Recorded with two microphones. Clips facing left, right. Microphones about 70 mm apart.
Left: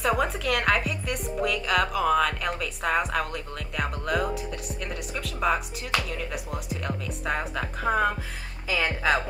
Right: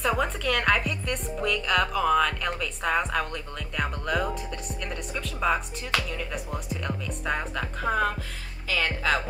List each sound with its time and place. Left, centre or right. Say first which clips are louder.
0.0 s speech: left 1 dB; centre